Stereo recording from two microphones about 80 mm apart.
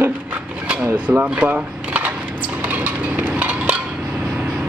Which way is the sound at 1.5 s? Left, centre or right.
Centre.